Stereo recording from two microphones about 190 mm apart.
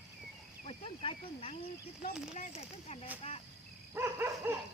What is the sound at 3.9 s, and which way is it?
Dog, 10° right (ahead or behind).